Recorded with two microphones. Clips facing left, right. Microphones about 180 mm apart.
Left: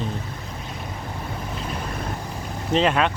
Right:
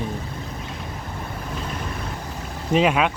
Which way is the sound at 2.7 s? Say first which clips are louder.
Right 1 dB; 10° right (ahead or behind).